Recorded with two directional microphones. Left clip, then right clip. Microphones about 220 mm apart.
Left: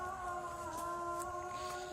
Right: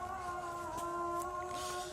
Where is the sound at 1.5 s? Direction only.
45° right (ahead or behind).